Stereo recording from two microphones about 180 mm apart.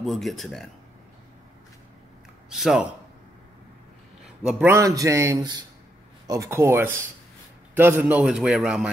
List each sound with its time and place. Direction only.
0.0 s a man's voice: centre (ahead or behind)
2.5 s a man's voice: 5° right (ahead or behind)
4.5 s a man's voice: 10° right (ahead or behind)